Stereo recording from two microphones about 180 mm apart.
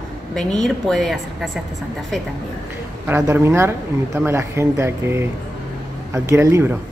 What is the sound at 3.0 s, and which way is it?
Speech, 15° right (ahead or behind).